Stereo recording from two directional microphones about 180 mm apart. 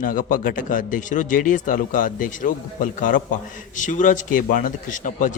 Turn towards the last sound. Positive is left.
turn(degrees=45)  # may be behind; listen again after turning